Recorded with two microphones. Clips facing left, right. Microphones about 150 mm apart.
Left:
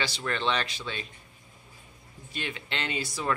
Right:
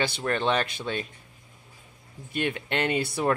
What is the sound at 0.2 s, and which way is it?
Speech, 45° right (ahead or behind).